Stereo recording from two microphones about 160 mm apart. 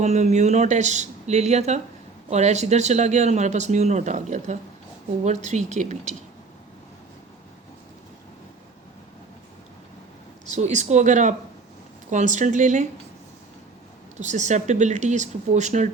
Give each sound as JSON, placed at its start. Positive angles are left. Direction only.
{"t": 0.0, "sound": "speech", "side_deg": -45}
{"t": 10.5, "sound": "speech", "side_deg": -45}
{"t": 14.2, "sound": "speech", "side_deg": -50}